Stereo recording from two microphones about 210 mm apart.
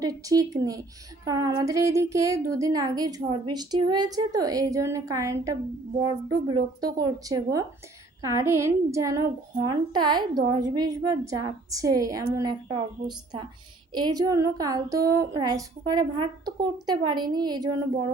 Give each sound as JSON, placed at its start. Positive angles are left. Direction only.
{"t": 0.0, "sound": "a woman's voice", "side_deg": -15}